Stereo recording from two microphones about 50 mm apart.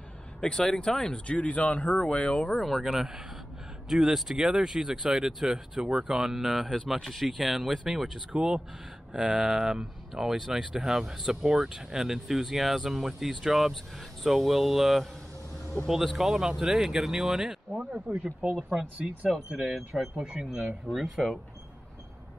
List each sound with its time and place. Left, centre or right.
0.4 s speech: centre
2.6 s speech: centre
19.9 s speech: centre
20.2 s speech: centre
20.9 s speech: centre